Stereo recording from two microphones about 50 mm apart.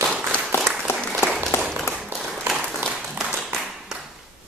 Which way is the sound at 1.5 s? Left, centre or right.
Left.